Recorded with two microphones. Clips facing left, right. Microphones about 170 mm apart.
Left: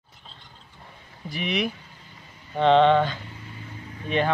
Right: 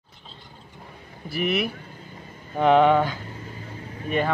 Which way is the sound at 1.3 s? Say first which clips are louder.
Right 2 dB; 5° right (ahead or behind).